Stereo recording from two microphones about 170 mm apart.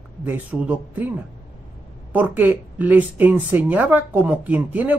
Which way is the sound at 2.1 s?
10° right (ahead or behind).